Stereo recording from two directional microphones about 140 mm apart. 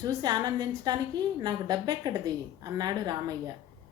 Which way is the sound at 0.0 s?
30° right (ahead or behind).